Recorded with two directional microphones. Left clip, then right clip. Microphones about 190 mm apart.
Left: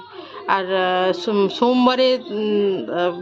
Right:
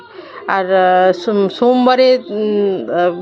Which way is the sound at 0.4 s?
15° right (ahead or behind).